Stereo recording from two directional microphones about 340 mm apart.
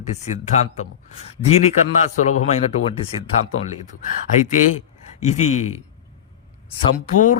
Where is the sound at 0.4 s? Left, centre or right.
Centre.